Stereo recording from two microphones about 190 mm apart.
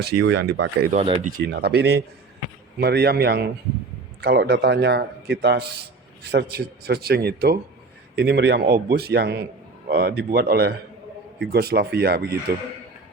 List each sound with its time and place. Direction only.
0.2 s speech: 65° right (ahead or behind)
0.9 s speech: 35° right (ahead or behind)
1.4 s speech: 60° right (ahead or behind)